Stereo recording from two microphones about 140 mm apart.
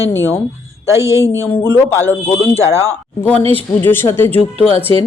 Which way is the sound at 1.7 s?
15° left (ahead or behind).